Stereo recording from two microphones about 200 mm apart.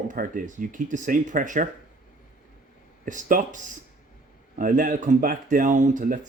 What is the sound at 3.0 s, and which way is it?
Speech, 40° right (ahead or behind).